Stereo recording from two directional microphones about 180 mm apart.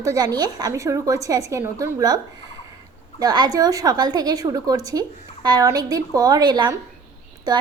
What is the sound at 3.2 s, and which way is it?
A woman's voice, 20° right (ahead or behind).